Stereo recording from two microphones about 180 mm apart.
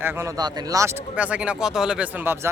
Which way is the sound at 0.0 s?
15° right (ahead or behind).